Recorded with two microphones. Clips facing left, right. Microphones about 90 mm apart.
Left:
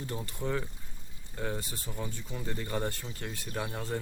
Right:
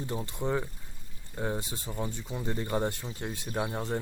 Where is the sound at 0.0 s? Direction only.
20° right (ahead or behind).